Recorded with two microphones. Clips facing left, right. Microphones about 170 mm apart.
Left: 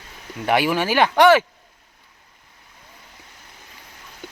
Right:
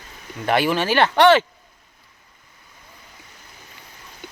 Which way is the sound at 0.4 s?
10° left (ahead or behind).